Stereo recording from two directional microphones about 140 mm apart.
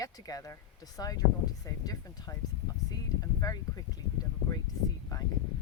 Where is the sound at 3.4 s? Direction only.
25° left (ahead or behind).